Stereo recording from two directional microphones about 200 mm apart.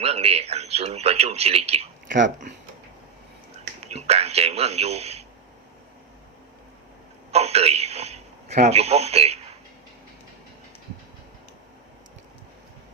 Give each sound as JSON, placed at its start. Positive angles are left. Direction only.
{"t": 0.0, "sound": "speech", "side_deg": -30}
{"t": 3.8, "sound": "a man's voice", "side_deg": -30}
{"t": 7.3, "sound": "a sound", "side_deg": -30}